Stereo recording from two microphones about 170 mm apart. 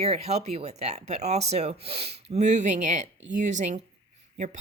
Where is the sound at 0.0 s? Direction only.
40° right (ahead or behind).